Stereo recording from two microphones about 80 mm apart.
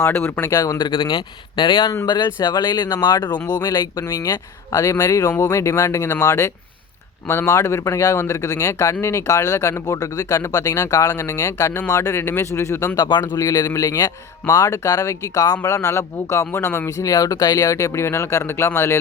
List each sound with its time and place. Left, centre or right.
0.0 s speech: left
0.5 s speech: left
0.9 s speech: left
2.0 s speech: left
13.0 s speech: left